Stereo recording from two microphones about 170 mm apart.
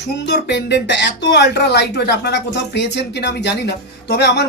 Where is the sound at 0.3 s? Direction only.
90° left.